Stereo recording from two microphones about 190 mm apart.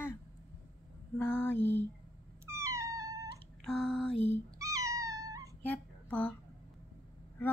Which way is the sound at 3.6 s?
5° left (ahead or behind).